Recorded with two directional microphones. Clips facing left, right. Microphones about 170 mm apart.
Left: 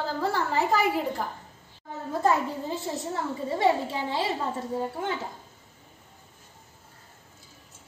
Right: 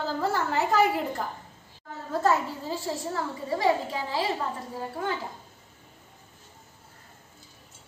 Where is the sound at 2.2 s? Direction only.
20° left (ahead or behind).